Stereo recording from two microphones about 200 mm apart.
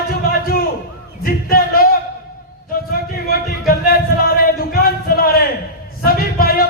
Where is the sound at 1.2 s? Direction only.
45° left (ahead or behind).